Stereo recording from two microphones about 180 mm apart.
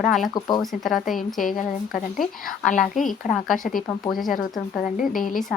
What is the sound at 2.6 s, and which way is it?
A woman's voice, 45° left (ahead or behind).